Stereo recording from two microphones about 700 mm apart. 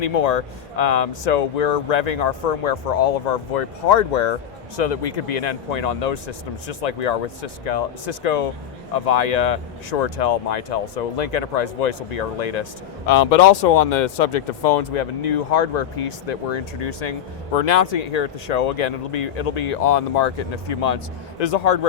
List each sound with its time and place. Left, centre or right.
0.0 s speech: left
13.1 s speech: left